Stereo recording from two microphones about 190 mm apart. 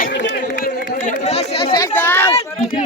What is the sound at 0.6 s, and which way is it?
Chatter, 40° left (ahead or behind).